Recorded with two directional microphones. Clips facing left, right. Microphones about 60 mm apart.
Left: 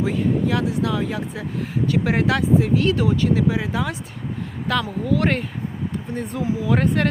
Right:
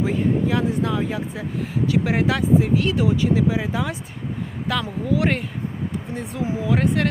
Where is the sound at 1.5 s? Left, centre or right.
Centre.